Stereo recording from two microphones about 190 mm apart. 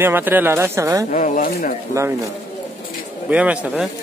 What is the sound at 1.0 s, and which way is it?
Speech, 45° left (ahead or behind).